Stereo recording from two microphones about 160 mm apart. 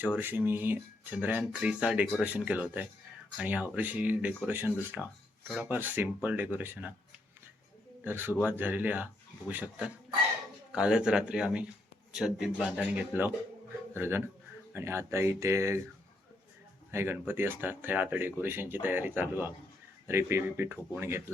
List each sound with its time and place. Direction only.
0.0 s speech: 10° right (ahead or behind)
8.0 s speech: 15° right (ahead or behind)
16.9 s speech: 15° right (ahead or behind)